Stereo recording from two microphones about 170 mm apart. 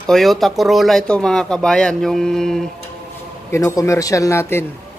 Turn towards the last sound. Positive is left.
turn(degrees=15)  # may be behind; listen again after turning